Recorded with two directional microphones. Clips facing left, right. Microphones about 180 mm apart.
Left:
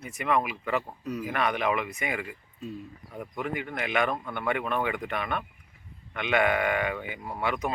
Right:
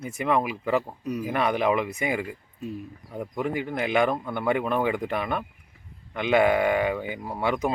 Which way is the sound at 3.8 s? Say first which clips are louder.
Right 5 dB; 30° right (ahead or behind).